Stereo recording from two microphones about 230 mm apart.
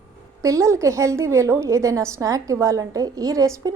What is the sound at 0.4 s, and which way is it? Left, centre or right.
A woman's voice, centre.